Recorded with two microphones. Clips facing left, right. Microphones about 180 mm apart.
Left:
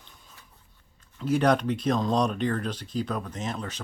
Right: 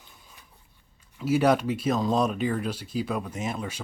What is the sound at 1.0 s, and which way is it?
Speech, 5° right (ahead or behind).